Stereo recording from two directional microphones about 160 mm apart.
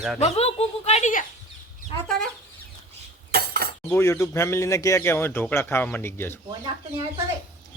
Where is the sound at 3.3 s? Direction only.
70° right (ahead or behind).